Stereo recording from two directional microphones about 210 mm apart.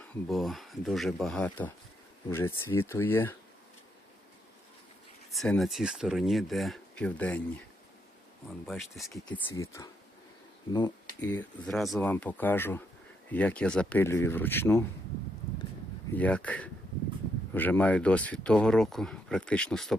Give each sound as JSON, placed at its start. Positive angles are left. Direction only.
{"t": 0.0, "sound": "speech", "side_deg": 0}
{"t": 5.3, "sound": "speech", "side_deg": 0}
{"t": 8.6, "sound": "speech", "side_deg": 0}
{"t": 9.6, "sound": "speech", "side_deg": 15}
{"t": 11.2, "sound": "speech", "side_deg": 10}
{"t": 16.1, "sound": "speech", "side_deg": 5}